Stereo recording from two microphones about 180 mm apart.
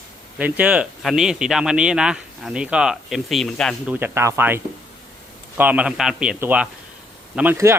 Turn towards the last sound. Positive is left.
turn(degrees=-10)  # may be behind; listen again after turning